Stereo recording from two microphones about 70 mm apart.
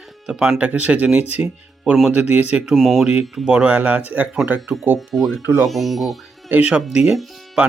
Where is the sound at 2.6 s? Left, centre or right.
Centre.